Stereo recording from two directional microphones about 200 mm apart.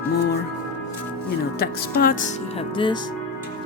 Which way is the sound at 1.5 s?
50° left (ahead or behind).